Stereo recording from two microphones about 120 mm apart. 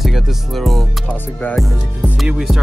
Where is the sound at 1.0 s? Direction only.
15° left (ahead or behind).